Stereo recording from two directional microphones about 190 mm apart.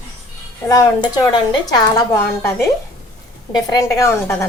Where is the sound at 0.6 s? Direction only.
20° left (ahead or behind).